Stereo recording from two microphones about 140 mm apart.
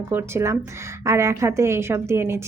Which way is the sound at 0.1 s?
20° right (ahead or behind).